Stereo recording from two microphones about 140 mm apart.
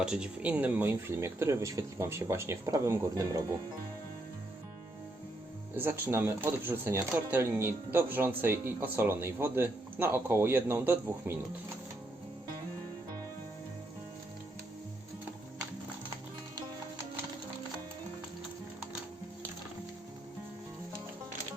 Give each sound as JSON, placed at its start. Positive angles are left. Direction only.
{"t": 0.0, "sound": "speech", "side_deg": -5}
{"t": 5.7, "sound": "speech", "side_deg": -15}